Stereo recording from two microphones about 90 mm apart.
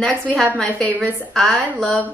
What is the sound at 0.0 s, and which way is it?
A woman's voice, 10° left (ahead or behind).